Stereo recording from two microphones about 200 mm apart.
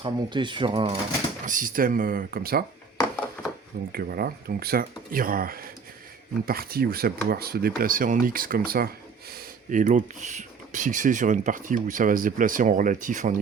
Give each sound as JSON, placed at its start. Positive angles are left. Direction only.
{"t": 0.0, "sound": "speech", "side_deg": -25}
{"t": 1.5, "sound": "speech", "side_deg": -40}
{"t": 3.9, "sound": "speech", "side_deg": -50}